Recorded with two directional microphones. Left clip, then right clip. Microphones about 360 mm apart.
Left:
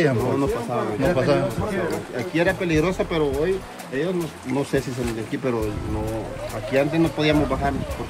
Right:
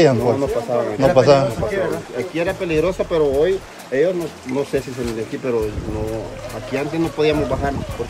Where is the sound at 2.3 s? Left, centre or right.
Centre.